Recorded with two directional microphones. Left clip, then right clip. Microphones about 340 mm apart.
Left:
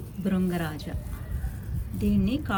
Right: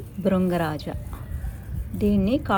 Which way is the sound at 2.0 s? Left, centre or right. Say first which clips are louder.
Right 6 dB; centre.